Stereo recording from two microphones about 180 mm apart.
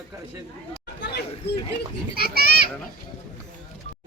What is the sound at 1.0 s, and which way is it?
Chatter, 65° left (ahead or behind).